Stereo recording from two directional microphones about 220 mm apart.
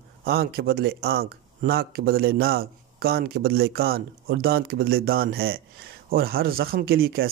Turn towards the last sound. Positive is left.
turn(degrees=-45)  # may be behind; listen again after turning